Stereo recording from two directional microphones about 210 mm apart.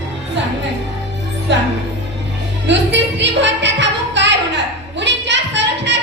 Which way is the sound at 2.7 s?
55° right (ahead or behind).